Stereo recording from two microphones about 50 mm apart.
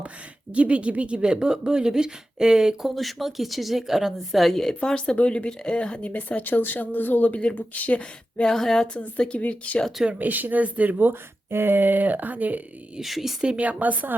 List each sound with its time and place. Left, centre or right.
0.5 s speech: right
2.9 s a woman's voice: centre; by 8.4 s left
8.4 s a woman's voice: centre
9.0 s speech: left
10.2 s speech: right
13.0 s speech: centre
13.6 s speech: right